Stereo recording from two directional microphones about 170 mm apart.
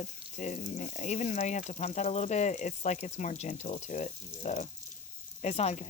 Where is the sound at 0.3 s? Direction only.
45° left (ahead or behind).